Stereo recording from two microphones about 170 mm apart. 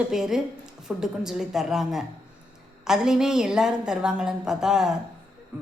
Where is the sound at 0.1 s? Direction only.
5° right (ahead or behind).